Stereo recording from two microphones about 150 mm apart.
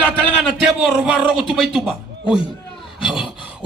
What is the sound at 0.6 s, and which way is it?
A man's voice, 10° right (ahead or behind).